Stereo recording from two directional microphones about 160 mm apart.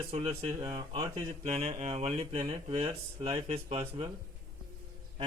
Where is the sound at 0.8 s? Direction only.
25° right (ahead or behind).